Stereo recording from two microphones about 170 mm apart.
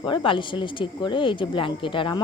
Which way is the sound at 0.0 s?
30° left (ahead or behind).